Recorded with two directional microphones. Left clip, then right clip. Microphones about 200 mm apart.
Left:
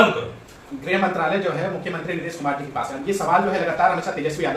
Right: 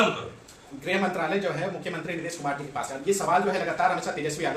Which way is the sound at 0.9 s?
60° right (ahead or behind).